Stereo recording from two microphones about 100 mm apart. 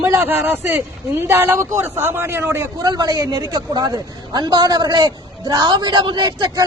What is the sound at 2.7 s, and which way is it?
A woman's voice, 40° right (ahead or behind).